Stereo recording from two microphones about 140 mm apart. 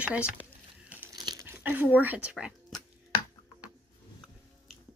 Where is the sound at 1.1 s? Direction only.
30° right (ahead or behind).